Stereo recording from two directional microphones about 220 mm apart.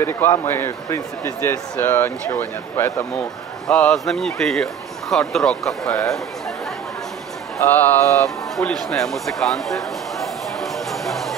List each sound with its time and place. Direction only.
0.0 s speech: 10° left (ahead or behind)
7.5 s speech: 10° left (ahead or behind)
8.7 s a sound: centre (ahead or behind)